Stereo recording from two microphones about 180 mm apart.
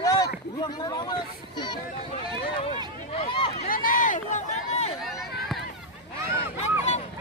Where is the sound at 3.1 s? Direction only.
30° left (ahead or behind).